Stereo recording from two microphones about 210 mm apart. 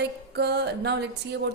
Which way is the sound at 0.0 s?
50° right (ahead or behind).